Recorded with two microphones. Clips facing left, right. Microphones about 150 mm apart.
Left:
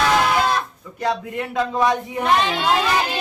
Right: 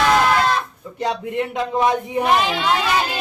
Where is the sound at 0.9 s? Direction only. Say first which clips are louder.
Right 1 dB; 25° right (ahead or behind).